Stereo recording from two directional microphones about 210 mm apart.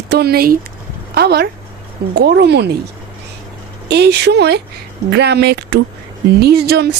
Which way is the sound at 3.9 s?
50° right (ahead or behind).